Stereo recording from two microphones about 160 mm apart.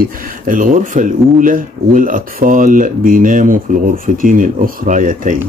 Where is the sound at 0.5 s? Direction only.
55° right (ahead or behind).